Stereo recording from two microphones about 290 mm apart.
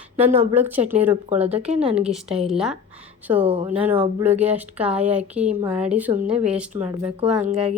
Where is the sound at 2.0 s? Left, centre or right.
Centre.